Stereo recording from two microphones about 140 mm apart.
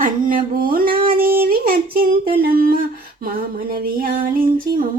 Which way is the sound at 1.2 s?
90° right.